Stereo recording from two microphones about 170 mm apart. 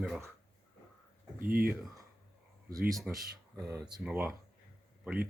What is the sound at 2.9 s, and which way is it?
Speech, centre (ahead or behind).